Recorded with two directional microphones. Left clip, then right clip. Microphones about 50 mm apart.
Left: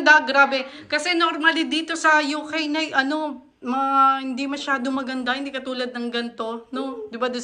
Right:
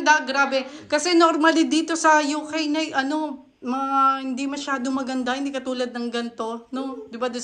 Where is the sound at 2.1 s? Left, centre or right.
Right.